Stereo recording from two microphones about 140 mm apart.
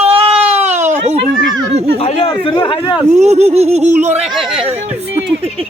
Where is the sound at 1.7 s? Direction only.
45° right (ahead or behind).